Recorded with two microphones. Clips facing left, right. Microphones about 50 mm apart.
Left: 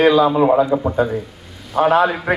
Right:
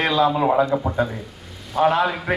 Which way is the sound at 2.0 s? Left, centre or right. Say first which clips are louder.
Left 5 dB; centre.